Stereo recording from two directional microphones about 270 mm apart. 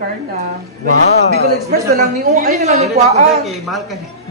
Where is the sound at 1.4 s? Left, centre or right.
Right.